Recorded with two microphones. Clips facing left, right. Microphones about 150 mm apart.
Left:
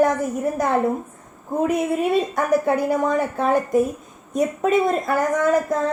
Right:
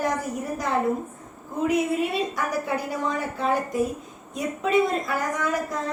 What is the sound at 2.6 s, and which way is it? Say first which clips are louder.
A woman's voice: left 8 dB; 50° left (ahead or behind).